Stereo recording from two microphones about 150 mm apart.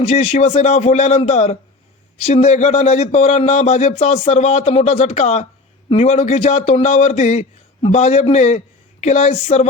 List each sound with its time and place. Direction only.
0.0 s a man's voice: 45° left (ahead or behind)